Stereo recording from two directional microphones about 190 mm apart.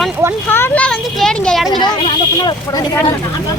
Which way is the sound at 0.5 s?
10° left (ahead or behind).